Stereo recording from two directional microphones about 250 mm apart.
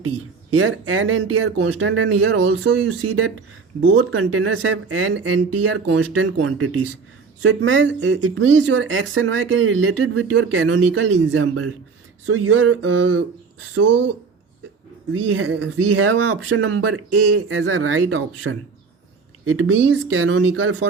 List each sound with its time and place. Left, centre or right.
0.5 s speech: right
15.4 s speech: right